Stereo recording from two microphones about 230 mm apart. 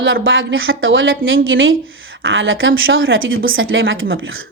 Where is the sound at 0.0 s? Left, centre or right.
Right.